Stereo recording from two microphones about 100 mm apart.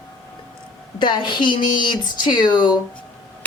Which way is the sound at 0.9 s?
55° left (ahead or behind).